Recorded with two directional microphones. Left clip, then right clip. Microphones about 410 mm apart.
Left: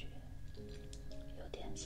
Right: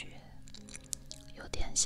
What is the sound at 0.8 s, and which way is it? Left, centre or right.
Music, right.